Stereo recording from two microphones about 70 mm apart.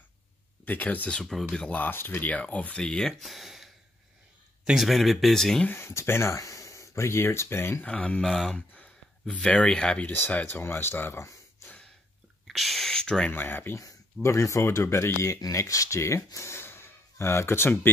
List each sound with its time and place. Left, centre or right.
0.7 s speech: left
2.3 s speech: centre
5.7 s speech: left
7.8 s speech: centre
8.3 s speech: centre
8.5 s a sound: left
9.2 s speech: centre; by 11.2 s left
12.4 s a sound: centre
13.3 s speech: left
14.2 s speech: left
15.4 s speech: left
16.3 s a sound: left